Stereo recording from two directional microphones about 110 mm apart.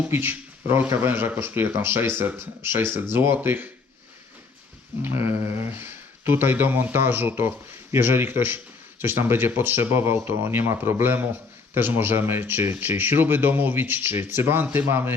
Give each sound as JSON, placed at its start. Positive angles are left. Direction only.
{"t": 0.1, "sound": "speech", "side_deg": -20}
{"t": 5.0, "sound": "speech", "side_deg": -20}